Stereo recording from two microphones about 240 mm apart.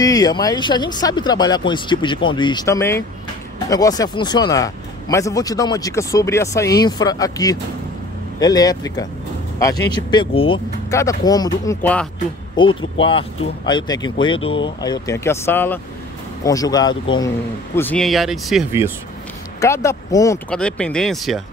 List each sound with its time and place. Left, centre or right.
0.0 s speech: centre
12.6 s speech: centre
19.6 s speech: centre